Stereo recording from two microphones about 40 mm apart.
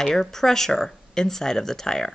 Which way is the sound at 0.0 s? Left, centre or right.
Centre.